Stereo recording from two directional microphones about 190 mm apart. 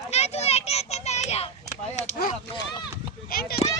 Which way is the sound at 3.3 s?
55° left (ahead or behind).